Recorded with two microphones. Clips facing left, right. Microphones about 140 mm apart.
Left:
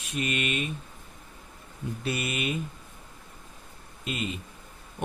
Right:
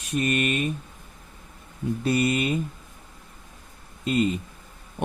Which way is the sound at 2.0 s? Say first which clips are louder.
Right 8 dB; 40° right (ahead or behind).